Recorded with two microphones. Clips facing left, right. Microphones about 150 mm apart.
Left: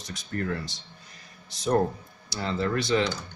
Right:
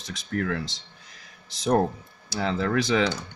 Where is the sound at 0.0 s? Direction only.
90° right.